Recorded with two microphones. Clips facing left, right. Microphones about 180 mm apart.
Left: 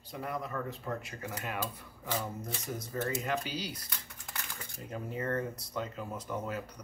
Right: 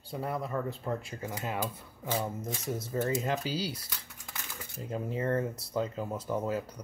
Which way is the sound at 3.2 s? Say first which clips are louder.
Right 3 dB; 30° right (ahead or behind).